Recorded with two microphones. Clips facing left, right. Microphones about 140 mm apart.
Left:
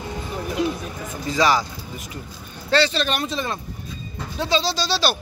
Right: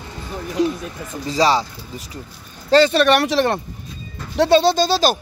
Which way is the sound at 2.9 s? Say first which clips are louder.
Right 9 dB; 65° right (ahead or behind).